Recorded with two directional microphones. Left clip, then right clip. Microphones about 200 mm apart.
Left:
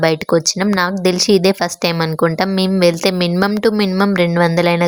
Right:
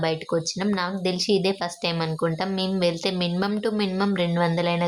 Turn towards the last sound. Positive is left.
turn(degrees=40)  # may be behind; listen again after turning